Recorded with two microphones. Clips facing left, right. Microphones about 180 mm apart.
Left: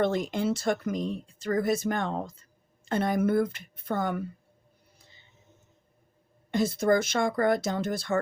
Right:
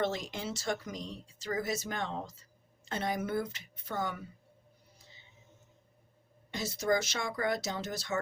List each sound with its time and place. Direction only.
0.0 s speech: 55° left (ahead or behind)
4.9 s music: 55° left (ahead or behind)
6.5 s speech: 55° left (ahead or behind)